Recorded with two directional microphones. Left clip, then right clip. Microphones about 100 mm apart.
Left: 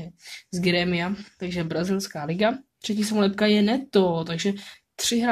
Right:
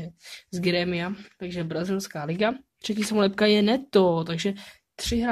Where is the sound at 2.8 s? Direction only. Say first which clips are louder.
Even; 50° right (ahead or behind).